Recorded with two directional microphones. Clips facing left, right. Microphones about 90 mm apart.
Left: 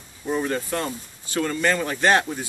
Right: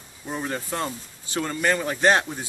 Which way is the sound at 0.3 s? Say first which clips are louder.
Left 5 dB; 15° right (ahead or behind).